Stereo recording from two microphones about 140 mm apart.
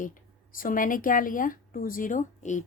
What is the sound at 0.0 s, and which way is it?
Speech, 75° left (ahead or behind).